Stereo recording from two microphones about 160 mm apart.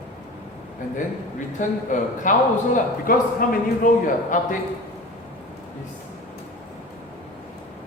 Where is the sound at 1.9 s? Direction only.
55° left (ahead or behind).